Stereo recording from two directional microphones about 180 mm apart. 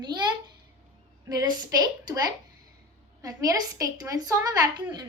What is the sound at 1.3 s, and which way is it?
A woman's voice, 20° right (ahead or behind).